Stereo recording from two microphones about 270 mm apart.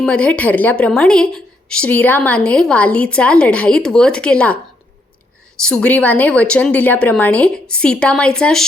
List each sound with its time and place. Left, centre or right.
0.0 s a woman's voice: centre
5.6 s a woman's voice: centre